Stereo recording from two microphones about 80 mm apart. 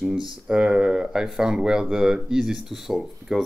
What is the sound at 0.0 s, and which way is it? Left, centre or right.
Speech, centre.